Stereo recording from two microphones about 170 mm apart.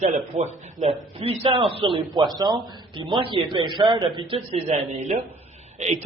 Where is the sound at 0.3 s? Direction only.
40° right (ahead or behind).